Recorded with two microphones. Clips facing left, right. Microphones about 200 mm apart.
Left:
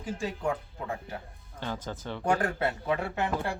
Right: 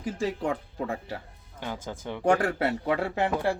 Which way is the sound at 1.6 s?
10° right (ahead or behind).